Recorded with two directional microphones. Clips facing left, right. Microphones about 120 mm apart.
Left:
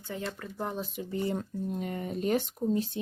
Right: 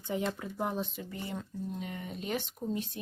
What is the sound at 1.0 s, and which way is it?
Speech, 20° left (ahead or behind).